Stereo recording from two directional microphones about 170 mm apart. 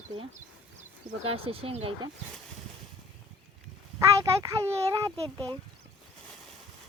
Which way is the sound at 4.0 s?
15° right (ahead or behind).